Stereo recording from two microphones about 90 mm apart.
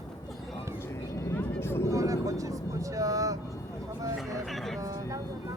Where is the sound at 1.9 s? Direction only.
40° right (ahead or behind).